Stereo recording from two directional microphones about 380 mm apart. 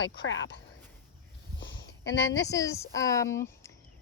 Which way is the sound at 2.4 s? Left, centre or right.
Centre.